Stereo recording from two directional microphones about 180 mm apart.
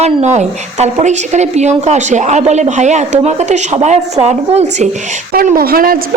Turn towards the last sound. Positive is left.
turn(degrees=-55)  # may be behind; listen again after turning